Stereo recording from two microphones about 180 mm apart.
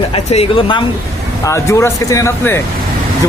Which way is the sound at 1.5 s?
15° left (ahead or behind).